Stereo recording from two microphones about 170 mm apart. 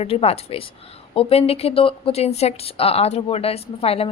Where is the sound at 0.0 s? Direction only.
35° left (ahead or behind).